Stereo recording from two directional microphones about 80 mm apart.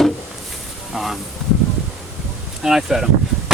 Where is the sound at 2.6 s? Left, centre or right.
Centre.